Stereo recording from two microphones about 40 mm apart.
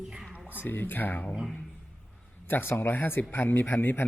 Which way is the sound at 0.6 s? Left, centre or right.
Left.